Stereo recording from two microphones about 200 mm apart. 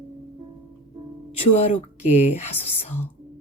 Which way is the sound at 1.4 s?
35° left (ahead or behind).